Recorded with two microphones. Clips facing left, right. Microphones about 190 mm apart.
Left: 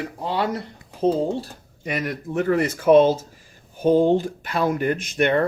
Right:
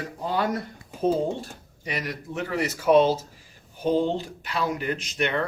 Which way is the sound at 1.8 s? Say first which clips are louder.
Left 5 dB; 50° left (ahead or behind).